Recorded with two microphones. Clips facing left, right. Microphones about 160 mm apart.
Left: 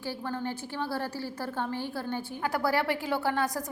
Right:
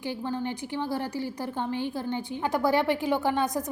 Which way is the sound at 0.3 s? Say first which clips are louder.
Right 3 dB; 15° right (ahead or behind).